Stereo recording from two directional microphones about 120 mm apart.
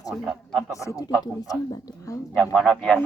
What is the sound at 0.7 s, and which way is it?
Speech, 25° left (ahead or behind).